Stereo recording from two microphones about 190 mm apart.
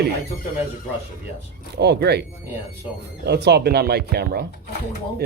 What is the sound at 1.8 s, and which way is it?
Speech, 60° right (ahead or behind).